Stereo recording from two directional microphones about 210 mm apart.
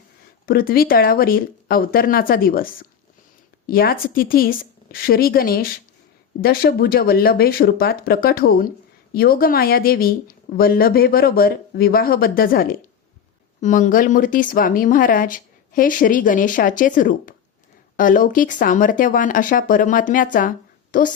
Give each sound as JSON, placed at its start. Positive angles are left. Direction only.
{"t": 0.4, "sound": "speech", "side_deg": 45}